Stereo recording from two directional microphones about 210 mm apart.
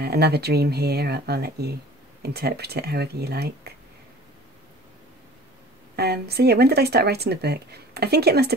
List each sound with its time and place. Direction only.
0.0 s speech: 50° right (ahead or behind)
5.9 s speech: 50° right (ahead or behind)